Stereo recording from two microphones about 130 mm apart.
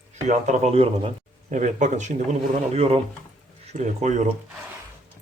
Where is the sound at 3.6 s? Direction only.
65° right (ahead or behind).